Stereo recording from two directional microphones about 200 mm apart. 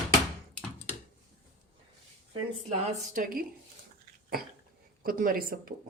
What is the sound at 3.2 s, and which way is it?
Speech, 40° right (ahead or behind).